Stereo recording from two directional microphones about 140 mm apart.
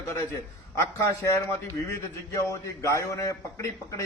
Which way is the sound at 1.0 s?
20° left (ahead or behind).